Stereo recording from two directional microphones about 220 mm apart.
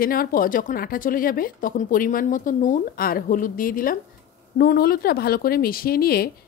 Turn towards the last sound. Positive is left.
turn(degrees=45)  # may be behind; listen again after turning